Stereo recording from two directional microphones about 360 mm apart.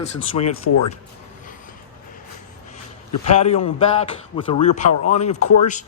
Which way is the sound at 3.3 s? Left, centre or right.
Centre.